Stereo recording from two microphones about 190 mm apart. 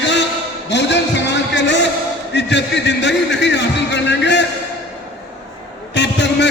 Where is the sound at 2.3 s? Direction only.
65° left (ahead or behind).